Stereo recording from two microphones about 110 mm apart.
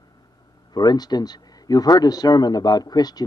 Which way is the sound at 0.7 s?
40° left (ahead or behind).